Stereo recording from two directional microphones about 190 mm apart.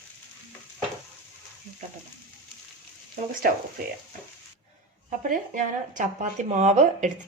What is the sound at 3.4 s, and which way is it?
Speech, 50° right (ahead or behind).